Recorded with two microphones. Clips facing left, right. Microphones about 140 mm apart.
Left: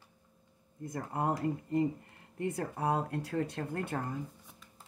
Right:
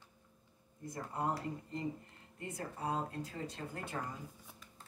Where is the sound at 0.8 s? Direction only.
55° left (ahead or behind).